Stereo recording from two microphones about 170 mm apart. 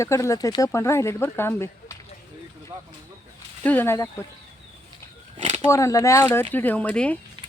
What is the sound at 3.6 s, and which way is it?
Speech, 10° left (ahead or behind).